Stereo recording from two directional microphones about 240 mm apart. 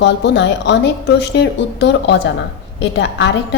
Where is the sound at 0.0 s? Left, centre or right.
Left.